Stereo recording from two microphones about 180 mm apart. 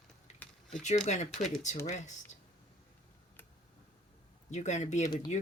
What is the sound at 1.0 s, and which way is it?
Speech, 40° left (ahead or behind).